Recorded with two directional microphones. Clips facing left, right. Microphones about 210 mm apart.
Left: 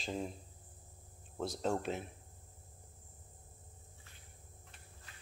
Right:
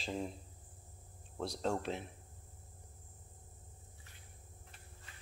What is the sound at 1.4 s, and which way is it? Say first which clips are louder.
Speech: left 1 dB; 5° left (ahead or behind).